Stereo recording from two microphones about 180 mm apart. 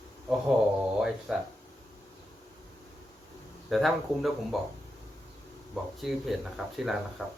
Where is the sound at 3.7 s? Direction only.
Centre (ahead or behind).